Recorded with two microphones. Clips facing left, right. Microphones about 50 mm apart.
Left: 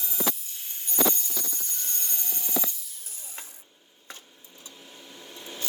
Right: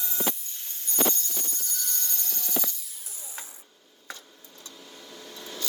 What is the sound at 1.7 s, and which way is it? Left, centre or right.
Alarm, left.